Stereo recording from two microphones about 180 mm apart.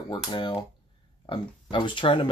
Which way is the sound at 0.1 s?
25° left (ahead or behind).